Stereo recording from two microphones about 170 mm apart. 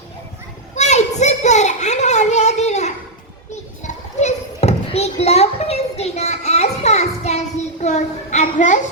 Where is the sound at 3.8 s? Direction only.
40° left (ahead or behind).